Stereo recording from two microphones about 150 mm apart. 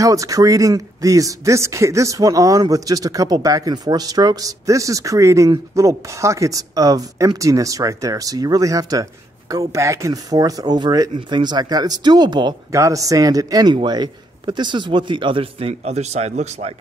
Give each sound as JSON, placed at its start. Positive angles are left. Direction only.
{"t": 0.0, "sound": "speech", "side_deg": -20}